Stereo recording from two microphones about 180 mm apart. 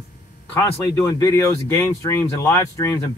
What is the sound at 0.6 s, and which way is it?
Speech, 15° left (ahead or behind).